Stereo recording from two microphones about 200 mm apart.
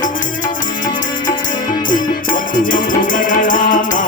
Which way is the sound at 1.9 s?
40° left (ahead or behind).